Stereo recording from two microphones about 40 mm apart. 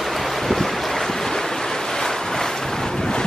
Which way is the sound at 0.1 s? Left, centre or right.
Centre.